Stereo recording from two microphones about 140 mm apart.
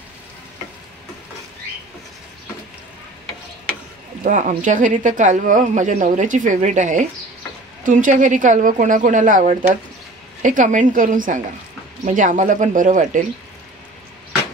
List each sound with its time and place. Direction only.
4.2 s speech: 65° right (ahead or behind)